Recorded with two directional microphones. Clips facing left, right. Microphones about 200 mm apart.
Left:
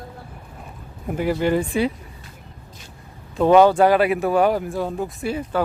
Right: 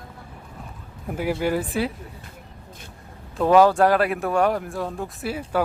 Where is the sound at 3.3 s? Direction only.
Centre (ahead or behind).